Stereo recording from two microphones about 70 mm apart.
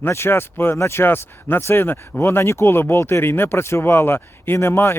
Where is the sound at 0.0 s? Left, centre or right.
Left.